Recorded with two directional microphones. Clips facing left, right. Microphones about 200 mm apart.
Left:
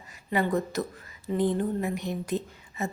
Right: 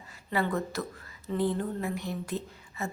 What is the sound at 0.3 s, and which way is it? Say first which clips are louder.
A woman's voice: left 3 dB; 15° left (ahead or behind).